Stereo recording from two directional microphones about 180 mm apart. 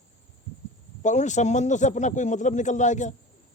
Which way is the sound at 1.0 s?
40° left (ahead or behind).